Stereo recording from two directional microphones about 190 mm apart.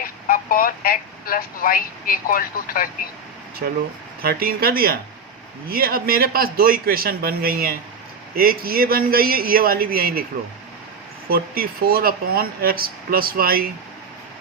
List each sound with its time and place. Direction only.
0.0 s speech: 50° left (ahead or behind)
4.2 s speech: 50° right (ahead or behind)
11.3 s speech: 50° right (ahead or behind)